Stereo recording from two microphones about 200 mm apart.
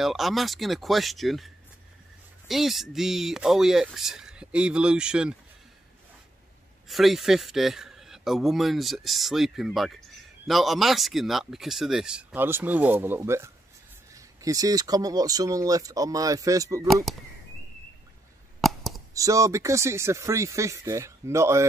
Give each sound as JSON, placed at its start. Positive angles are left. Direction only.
{"t": 0.0, "sound": "a man's voice", "side_deg": 0}
{"t": 6.9, "sound": "a man's voice", "side_deg": 0}
{"t": 16.8, "sound": "a man's voice", "side_deg": 0}
{"t": 18.6, "sound": "a sound", "side_deg": 0}
{"t": 19.1, "sound": "speech", "side_deg": -15}